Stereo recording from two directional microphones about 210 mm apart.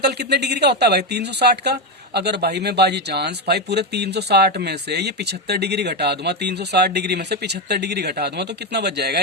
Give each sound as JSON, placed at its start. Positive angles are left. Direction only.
{"t": 0.0, "sound": "speech", "side_deg": -50}